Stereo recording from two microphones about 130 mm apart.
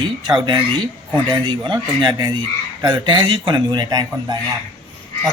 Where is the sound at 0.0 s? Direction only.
35° right (ahead or behind).